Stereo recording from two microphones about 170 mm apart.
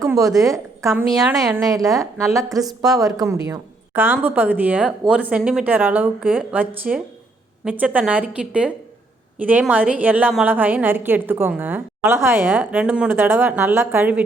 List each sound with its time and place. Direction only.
0.0 s a sound: 20° right (ahead or behind)
0.5 s a woman's voice: 15° right (ahead or behind)
3.9 s a woman's voice: 10° right (ahead or behind)